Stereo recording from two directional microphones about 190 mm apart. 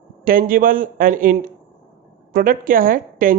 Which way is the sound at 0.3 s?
50° right (ahead or behind).